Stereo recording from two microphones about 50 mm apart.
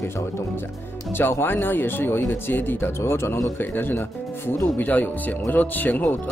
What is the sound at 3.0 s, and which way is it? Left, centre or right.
Speech, left.